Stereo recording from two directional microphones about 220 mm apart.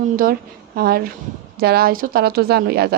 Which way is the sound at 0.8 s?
45° right (ahead or behind).